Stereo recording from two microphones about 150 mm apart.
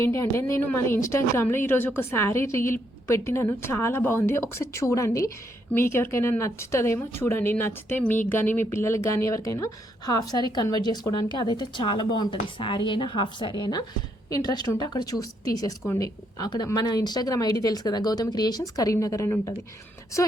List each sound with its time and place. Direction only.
0.0 s a woman's voice: 20° left (ahead or behind)